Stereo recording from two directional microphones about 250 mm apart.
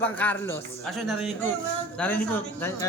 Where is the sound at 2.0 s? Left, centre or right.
Centre.